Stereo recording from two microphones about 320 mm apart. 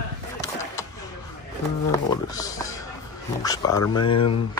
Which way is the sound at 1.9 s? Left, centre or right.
Centre.